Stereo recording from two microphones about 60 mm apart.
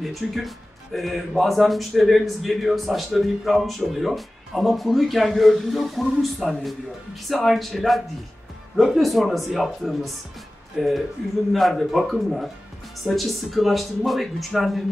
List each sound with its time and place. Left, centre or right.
0.0 s speech: centre